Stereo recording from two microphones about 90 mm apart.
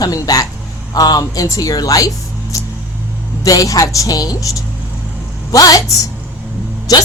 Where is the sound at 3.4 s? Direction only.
40° left (ahead or behind).